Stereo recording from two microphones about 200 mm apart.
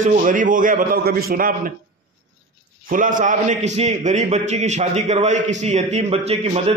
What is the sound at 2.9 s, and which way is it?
A man's voice, 40° right (ahead or behind).